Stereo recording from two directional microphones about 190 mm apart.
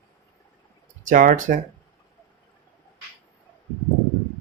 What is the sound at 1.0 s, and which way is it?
Speech, 45° right (ahead or behind).